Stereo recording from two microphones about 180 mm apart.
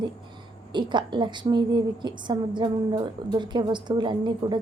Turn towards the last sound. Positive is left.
turn(degrees=-25)  # may be behind; listen again after turning